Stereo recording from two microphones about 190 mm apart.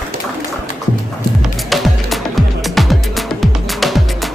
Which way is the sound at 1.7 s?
Centre (ahead or behind).